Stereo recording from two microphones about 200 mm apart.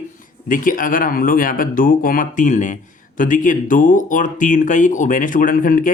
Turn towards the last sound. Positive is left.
turn(degrees=40)  # may be behind; listen again after turning